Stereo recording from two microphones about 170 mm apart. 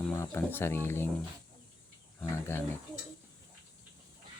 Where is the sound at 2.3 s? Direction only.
15° left (ahead or behind).